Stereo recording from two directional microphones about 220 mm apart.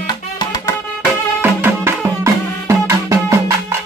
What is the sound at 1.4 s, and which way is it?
Music, 10° right (ahead or behind).